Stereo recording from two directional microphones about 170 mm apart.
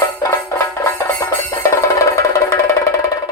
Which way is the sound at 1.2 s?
15° left (ahead or behind).